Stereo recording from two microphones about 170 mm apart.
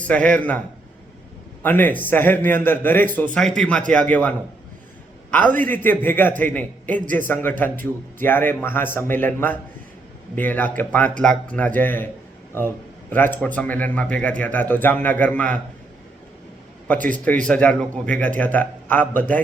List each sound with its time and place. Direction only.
0.0 s speech: 10° left (ahead or behind)
1.6 s a man's voice: 10° left (ahead or behind)
5.5 s speech: 10° left (ahead or behind)
7.0 s a man's voice: 50° right (ahead or behind)
7.5 s speech: 10° left (ahead or behind)
17.2 s speech: 5° left (ahead or behind)